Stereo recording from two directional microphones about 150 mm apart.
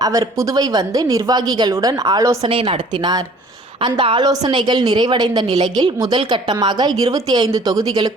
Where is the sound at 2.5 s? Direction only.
40° right (ahead or behind).